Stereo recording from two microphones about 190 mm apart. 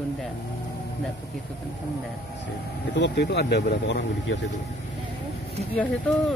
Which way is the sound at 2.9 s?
65° left (ahead or behind).